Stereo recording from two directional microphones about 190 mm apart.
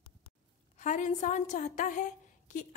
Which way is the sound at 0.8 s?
40° left (ahead or behind).